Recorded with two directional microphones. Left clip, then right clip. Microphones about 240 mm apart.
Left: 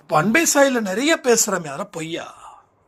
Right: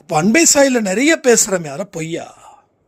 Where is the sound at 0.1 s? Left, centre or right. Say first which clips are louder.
Right 4 dB; right.